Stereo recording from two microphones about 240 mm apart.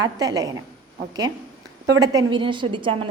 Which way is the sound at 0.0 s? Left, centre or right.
Centre.